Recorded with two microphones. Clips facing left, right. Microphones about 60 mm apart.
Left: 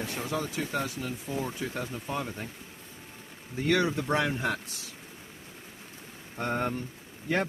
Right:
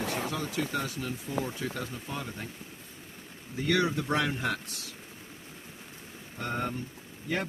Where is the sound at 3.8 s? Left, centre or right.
Left.